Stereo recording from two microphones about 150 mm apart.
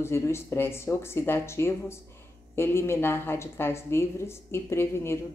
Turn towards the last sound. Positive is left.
turn(degrees=15)  # may be behind; listen again after turning